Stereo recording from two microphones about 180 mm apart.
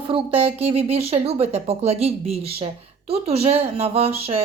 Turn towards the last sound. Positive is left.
turn(degrees=-35)  # may be behind; listen again after turning